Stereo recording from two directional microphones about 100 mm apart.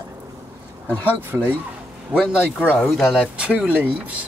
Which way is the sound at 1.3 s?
10° right (ahead or behind).